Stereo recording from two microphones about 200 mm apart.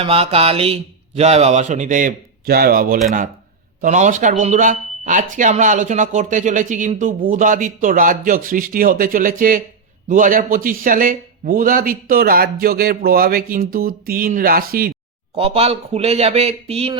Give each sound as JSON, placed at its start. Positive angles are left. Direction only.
{"t": 0.0, "sound": "a man's voice", "side_deg": -30}
{"t": 15.4, "sound": "speech", "side_deg": -30}